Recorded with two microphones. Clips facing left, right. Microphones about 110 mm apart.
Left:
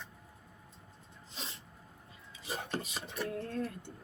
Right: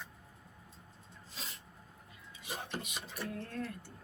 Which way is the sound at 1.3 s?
25° left (ahead or behind).